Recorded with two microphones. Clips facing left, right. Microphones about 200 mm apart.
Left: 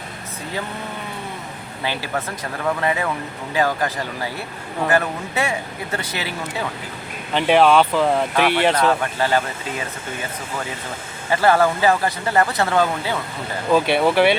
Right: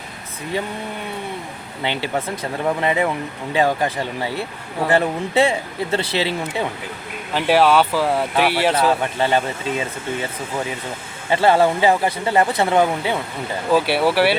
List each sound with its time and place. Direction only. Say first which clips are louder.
1.8 s speech: right 2 dB; 20° right (ahead or behind)
7.3 s speech: left 1 dB; 5° right (ahead or behind)
9.1 s speech: right 1 dB; 20° right (ahead or behind)
11.3 s speech: right 1 dB; 25° right (ahead or behind)
13.7 s speech: left 1 dB; 5° right (ahead or behind)